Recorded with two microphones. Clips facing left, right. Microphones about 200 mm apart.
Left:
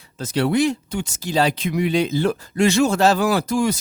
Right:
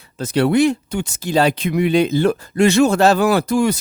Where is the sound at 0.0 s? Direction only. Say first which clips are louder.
Right 4 dB; 60° right (ahead or behind).